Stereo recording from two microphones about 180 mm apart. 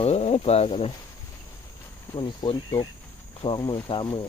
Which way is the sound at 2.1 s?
25° left (ahead or behind).